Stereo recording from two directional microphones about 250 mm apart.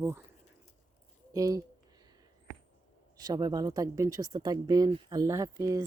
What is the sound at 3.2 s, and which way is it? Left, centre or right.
Speech, centre.